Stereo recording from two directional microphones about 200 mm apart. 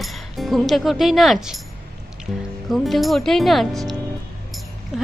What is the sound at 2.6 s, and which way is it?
A woman's voice, centre (ahead or behind).